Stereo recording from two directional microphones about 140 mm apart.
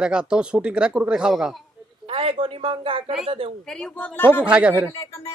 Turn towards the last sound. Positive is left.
turn(degrees=25)  # may be behind; listen again after turning